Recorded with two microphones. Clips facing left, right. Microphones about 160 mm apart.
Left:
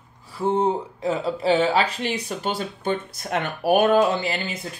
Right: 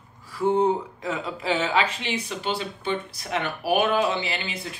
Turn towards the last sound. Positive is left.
turn(degrees=45)  # may be behind; listen again after turning